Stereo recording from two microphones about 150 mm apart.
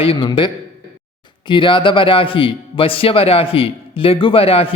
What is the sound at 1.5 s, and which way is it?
Speech, 35° left (ahead or behind).